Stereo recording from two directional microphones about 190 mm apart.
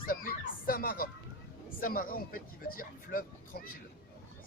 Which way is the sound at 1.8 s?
50° left (ahead or behind).